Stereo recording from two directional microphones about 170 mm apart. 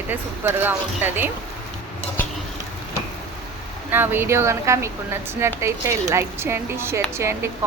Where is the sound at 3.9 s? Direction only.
10° right (ahead or behind).